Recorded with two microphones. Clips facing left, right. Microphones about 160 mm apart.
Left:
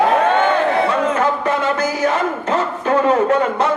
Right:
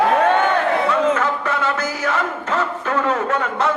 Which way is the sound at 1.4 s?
15° left (ahead or behind).